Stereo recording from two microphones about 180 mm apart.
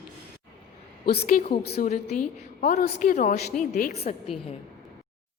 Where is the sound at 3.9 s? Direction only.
35° left (ahead or behind).